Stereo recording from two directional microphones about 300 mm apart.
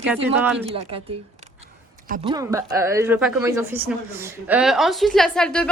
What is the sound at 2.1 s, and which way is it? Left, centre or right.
Speech, centre.